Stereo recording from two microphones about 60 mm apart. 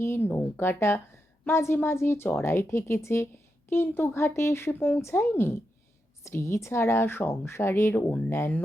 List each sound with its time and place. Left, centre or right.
0.0 s speech: left
6.2 s speech: left